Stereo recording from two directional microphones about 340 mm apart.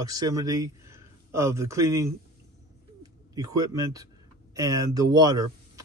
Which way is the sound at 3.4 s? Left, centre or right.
Centre.